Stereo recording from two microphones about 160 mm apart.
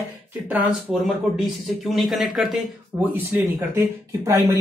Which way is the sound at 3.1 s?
15° right (ahead or behind).